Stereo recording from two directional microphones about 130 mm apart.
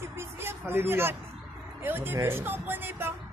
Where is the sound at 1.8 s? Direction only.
15° right (ahead or behind).